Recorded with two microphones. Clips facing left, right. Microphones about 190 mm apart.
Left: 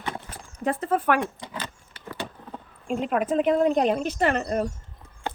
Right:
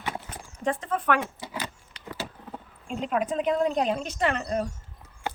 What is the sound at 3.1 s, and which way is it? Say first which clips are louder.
A woman's voice: left 3 dB; 50° left (ahead or behind).